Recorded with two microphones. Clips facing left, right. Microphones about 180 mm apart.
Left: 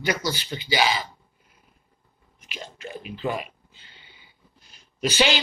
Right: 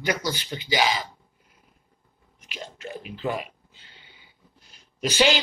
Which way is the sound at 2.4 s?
15° left (ahead or behind).